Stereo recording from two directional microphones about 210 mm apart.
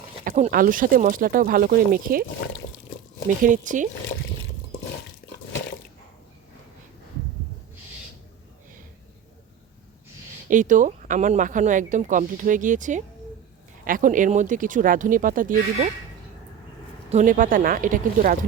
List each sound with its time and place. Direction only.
0.3 s speech: 40° right (ahead or behind)
3.4 s speech: 40° right (ahead or behind)
10.5 s speech: 35° right (ahead or behind)
17.1 s speech: 35° right (ahead or behind)